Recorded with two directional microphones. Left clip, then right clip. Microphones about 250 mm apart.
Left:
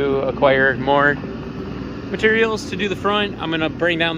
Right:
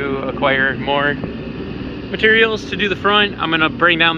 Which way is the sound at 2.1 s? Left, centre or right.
Centre.